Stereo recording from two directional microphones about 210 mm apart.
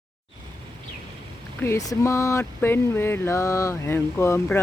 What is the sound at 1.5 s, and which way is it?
Speech, 10° left (ahead or behind).